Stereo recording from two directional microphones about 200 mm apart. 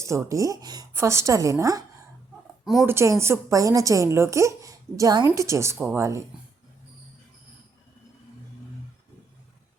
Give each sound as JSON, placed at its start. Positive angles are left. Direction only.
{"t": 0.0, "sound": "speech", "side_deg": -15}
{"t": 2.6, "sound": "speech", "side_deg": 0}
{"t": 2.9, "sound": "speech", "side_deg": -15}